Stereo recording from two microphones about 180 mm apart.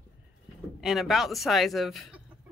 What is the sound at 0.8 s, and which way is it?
Speech, centre (ahead or behind).